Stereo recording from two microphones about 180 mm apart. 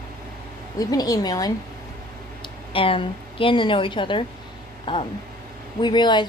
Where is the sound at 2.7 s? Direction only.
30° left (ahead or behind).